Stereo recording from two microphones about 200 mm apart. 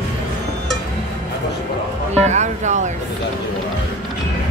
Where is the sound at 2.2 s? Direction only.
35° right (ahead or behind).